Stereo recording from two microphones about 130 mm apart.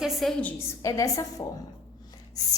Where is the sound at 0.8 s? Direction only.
25° left (ahead or behind).